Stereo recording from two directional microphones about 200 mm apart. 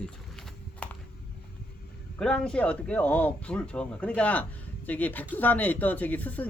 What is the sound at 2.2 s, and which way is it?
Speech, 5° left (ahead or behind).